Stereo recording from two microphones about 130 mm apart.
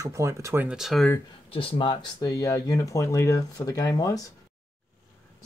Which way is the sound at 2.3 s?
25° left (ahead or behind).